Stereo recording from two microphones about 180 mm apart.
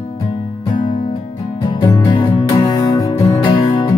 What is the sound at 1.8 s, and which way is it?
Music, 20° left (ahead or behind).